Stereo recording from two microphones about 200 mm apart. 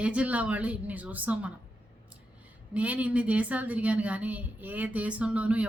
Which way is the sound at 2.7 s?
5° right (ahead or behind).